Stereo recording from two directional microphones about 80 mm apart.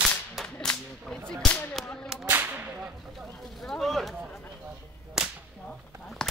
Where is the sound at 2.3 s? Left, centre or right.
Right.